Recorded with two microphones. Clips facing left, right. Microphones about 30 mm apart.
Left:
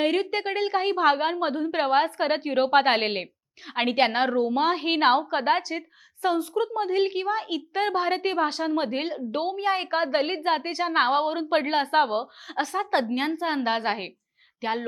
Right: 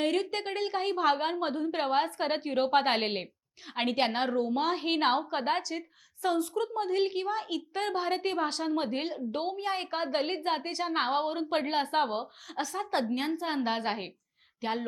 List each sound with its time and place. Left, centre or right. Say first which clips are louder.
0.0 s a woman's voice: left 5 dB; centre